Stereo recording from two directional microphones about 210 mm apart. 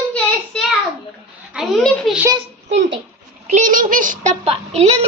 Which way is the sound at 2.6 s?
55° right (ahead or behind).